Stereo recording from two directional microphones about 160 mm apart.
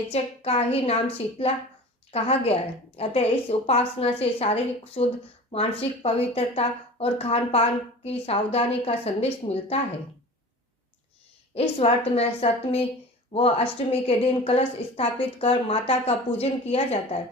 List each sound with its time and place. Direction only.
0.1 s speech: 40° left (ahead or behind)
2.1 s speech: 40° left (ahead or behind)
11.8 s speech: 40° left (ahead or behind)